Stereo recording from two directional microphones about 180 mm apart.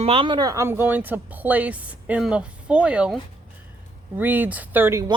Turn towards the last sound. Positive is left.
turn(degrees=-15)  # may be behind; listen again after turning